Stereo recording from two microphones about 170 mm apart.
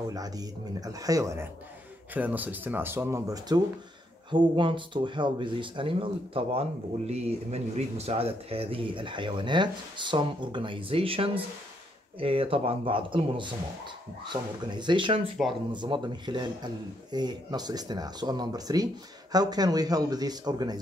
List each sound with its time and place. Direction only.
0.1 s speech: 20° right (ahead or behind)